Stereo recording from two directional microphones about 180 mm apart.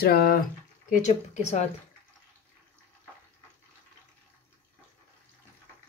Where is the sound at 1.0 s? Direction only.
40° left (ahead or behind).